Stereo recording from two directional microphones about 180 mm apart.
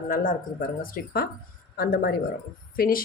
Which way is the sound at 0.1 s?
50° left (ahead or behind).